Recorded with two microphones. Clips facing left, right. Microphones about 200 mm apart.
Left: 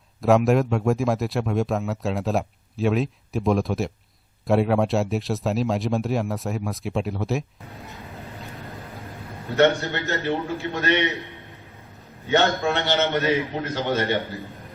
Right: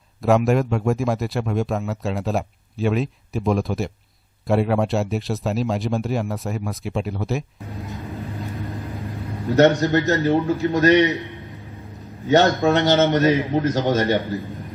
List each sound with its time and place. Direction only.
0.2 s speech: centre (ahead or behind)
9.6 s a man's voice: 40° right (ahead or behind)
12.6 s a man's voice: 40° right (ahead or behind)